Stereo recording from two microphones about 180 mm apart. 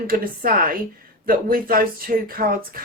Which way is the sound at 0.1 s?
50° right (ahead or behind).